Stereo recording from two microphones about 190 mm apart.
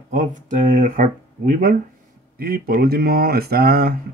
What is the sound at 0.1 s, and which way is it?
Speech, 40° right (ahead or behind).